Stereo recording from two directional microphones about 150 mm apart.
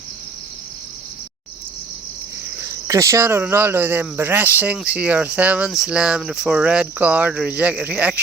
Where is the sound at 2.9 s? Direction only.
20° right (ahead or behind).